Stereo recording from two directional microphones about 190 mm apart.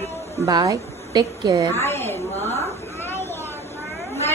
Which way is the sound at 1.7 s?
10° left (ahead or behind).